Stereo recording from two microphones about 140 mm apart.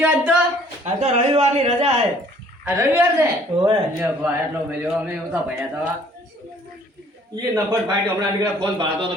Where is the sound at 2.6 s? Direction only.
15° right (ahead or behind).